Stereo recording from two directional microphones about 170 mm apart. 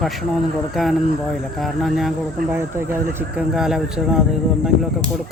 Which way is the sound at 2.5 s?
15° right (ahead or behind).